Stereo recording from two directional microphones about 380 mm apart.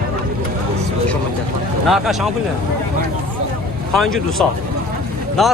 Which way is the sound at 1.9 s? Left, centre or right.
Centre.